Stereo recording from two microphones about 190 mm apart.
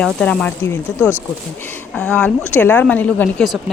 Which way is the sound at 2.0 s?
5° left (ahead or behind).